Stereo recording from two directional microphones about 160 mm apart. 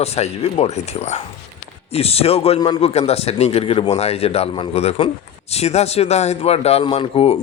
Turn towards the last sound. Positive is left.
turn(degrees=40)  # may be behind; listen again after turning